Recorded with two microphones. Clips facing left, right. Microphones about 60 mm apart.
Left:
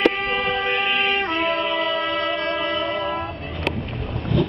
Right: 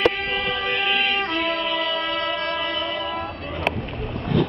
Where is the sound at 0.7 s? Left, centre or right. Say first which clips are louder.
Left 1 dB; centre.